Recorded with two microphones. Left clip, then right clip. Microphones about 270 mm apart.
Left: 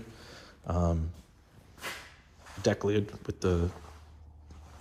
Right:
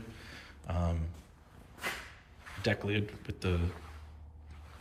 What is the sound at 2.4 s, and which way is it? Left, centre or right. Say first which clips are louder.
Speech: left 5 dB; centre.